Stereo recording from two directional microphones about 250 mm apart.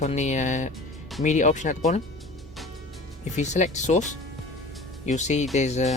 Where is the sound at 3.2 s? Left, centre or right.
Left.